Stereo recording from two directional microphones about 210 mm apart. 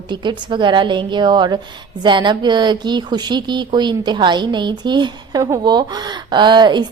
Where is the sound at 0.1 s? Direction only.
20° right (ahead or behind).